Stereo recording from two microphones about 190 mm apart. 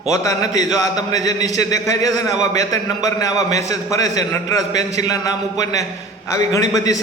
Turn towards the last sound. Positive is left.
turn(degrees=20)  # may be behind; listen again after turning